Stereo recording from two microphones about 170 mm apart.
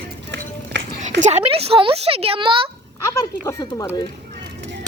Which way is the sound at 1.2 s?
40° right (ahead or behind).